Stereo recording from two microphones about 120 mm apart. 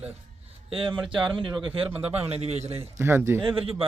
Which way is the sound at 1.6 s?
50° right (ahead or behind).